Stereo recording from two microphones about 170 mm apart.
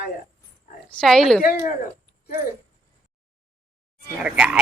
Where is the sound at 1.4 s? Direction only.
55° left (ahead or behind).